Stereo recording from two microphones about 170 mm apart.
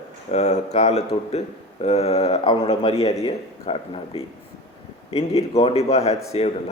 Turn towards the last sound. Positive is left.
turn(degrees=35)  # may be behind; listen again after turning